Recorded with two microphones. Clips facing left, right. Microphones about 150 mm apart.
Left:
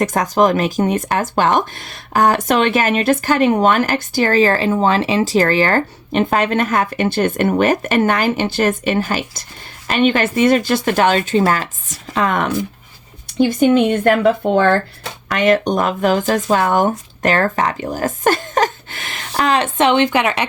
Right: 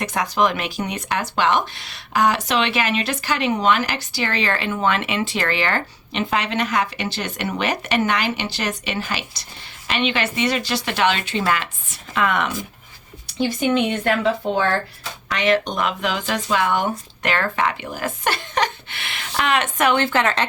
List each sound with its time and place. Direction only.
0.0 s speech: 45° left (ahead or behind); by 20.5 s 15° left (ahead or behind)